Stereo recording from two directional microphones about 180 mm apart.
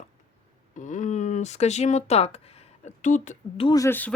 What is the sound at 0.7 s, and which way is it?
Speech, 45° left (ahead or behind).